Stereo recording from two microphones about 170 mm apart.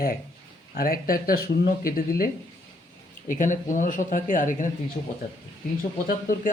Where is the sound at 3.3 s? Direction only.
50° left (ahead or behind).